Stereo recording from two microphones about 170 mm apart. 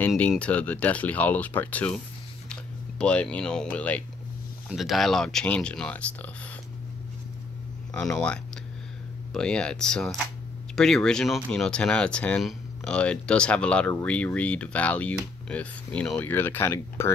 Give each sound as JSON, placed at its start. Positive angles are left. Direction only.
{"t": 0.0, "sound": "speech", "side_deg": 5}
{"t": 2.5, "sound": "a sound", "side_deg": 5}
{"t": 3.7, "sound": "speech", "side_deg": 10}
{"t": 7.9, "sound": "speech", "side_deg": 5}